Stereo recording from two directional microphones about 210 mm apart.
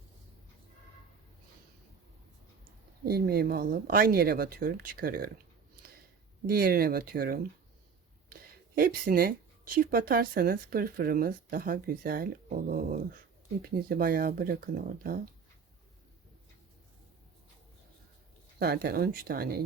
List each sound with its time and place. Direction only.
3.0 s speech: 45° right (ahead or behind)
6.5 s speech: 45° right (ahead or behind)
18.6 s speech: 50° right (ahead or behind)